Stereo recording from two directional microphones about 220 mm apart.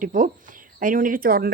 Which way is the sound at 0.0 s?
35° right (ahead or behind).